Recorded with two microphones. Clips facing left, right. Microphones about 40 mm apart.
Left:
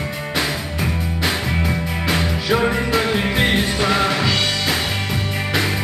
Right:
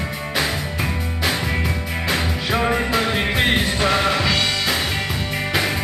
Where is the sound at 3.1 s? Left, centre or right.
Centre.